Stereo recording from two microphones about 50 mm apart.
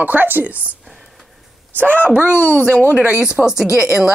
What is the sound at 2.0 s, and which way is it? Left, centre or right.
Speech, right.